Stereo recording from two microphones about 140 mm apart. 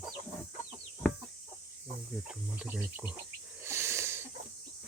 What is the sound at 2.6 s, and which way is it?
Speech, 10° right (ahead or behind).